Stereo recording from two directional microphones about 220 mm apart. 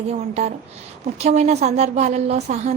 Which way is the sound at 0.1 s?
30° right (ahead or behind).